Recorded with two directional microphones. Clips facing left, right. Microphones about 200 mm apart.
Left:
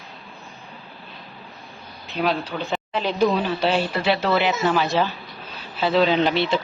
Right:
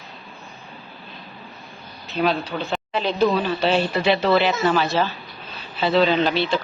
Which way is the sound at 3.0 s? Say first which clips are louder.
Right 1 dB; 10° left (ahead or behind).